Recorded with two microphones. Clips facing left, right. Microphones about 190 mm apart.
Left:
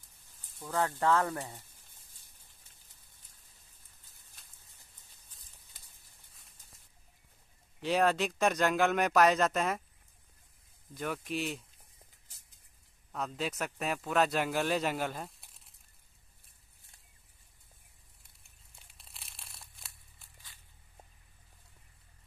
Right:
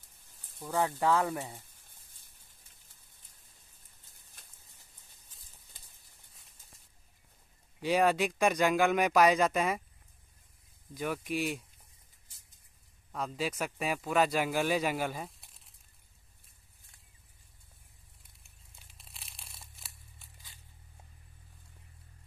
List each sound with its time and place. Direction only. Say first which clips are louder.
0.6 s speech: right 1 dB; 15° right (ahead or behind)
7.8 s speech: right 1 dB; 10° right (ahead or behind)
11.0 s speech: right 2 dB; 5° right (ahead or behind)
13.1 s speech: right 1 dB; 5° right (ahead or behind)
18.8 s crumpling: right 1 dB; centre (ahead or behind)